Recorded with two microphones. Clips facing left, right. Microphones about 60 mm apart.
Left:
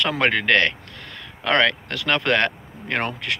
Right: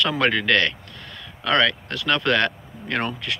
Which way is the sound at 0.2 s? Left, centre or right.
Left.